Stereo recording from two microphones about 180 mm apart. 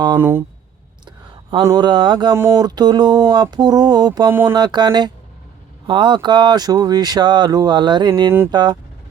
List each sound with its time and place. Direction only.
0.0 s speech: 20° right (ahead or behind)
1.0 s a sound: 30° right (ahead or behind)
1.6 s speech: 25° right (ahead or behind)
2.3 s speech: 15° right (ahead or behind)
4.5 s speech: 25° right (ahead or behind)